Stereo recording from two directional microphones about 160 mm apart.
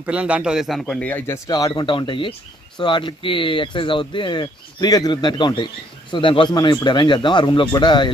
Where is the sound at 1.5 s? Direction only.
25° left (ahead or behind).